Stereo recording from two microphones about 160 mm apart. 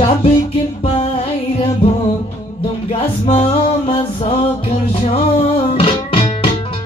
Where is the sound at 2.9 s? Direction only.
45° left (ahead or behind).